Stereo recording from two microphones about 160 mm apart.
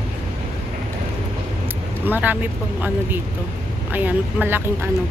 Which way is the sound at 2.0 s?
10° right (ahead or behind).